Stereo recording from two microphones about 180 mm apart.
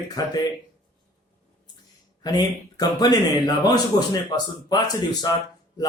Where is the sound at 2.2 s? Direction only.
20° left (ahead or behind).